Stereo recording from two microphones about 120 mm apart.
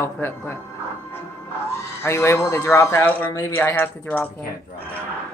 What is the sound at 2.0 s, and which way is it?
Speech, 20° left (ahead or behind).